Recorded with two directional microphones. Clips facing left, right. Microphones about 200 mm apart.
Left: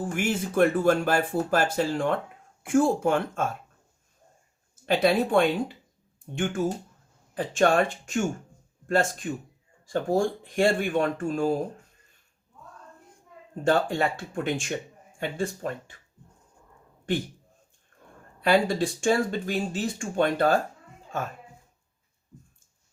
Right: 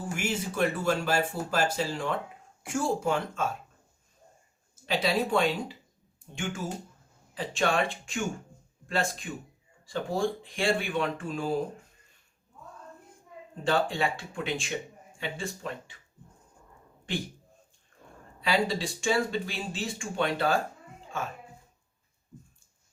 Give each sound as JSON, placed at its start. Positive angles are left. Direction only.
{"t": 0.0, "sound": "speech", "side_deg": 55}
{"t": 4.9, "sound": "speech", "side_deg": 55}
{"t": 13.7, "sound": "speech", "side_deg": 45}
{"t": 18.3, "sound": "speech", "side_deg": 50}